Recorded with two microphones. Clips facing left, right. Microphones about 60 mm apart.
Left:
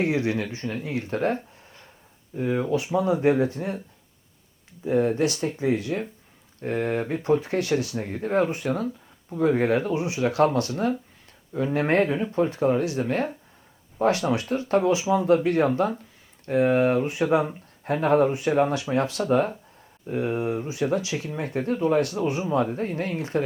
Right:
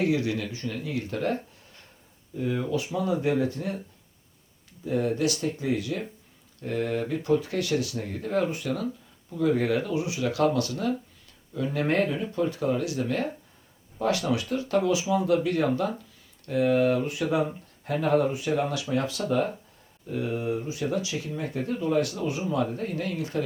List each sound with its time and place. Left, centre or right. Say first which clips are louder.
0.0 s speech: left 2 dB; left
4.9 s speech: left 4 dB; left
21.5 s speech: left 4 dB; left